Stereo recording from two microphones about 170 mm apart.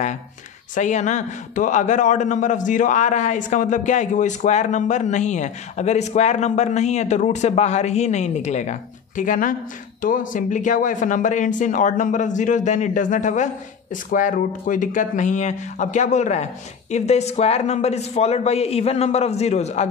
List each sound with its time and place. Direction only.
0.7 s a man's voice: 45° left (ahead or behind)